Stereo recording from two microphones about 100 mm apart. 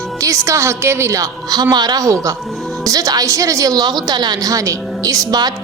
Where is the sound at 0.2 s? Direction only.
30° right (ahead or behind).